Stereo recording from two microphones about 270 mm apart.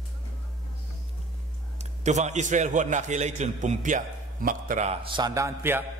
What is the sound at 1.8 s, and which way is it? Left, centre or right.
A man's voice, right.